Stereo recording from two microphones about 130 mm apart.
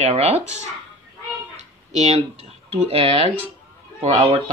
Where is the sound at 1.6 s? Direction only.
60° right (ahead or behind).